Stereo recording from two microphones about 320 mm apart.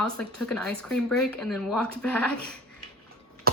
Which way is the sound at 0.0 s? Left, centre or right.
Centre.